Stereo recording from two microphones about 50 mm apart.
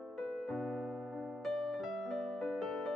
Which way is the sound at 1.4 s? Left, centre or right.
Centre.